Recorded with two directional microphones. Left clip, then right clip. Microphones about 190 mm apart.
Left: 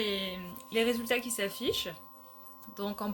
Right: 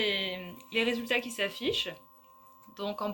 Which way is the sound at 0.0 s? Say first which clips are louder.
Right 3 dB; 40° left (ahead or behind).